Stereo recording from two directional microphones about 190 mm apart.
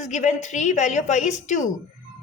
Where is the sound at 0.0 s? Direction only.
40° left (ahead or behind).